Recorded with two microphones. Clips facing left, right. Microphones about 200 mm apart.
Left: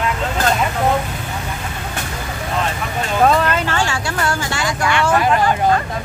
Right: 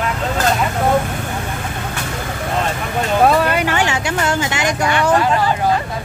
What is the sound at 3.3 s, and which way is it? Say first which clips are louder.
Vehicle: right 1 dB; 10° right (ahead or behind).